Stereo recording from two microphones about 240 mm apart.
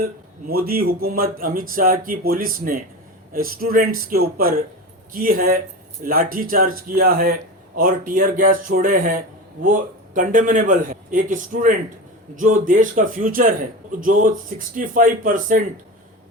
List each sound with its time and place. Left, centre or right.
0.0 s speech: right